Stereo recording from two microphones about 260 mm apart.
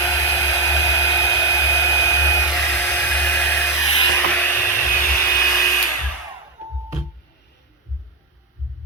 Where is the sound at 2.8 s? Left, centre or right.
Centre.